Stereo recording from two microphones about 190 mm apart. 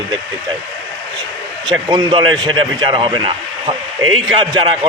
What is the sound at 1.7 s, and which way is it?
A man's voice, 20° right (ahead or behind).